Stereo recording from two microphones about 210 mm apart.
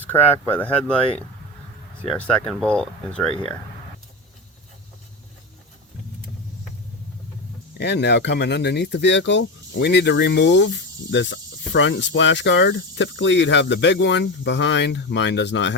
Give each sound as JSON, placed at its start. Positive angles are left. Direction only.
{"t": 0.0, "sound": "speech", "side_deg": 10}
{"t": 2.0, "sound": "speech", "side_deg": 5}
{"t": 7.7, "sound": "speech", "side_deg": 55}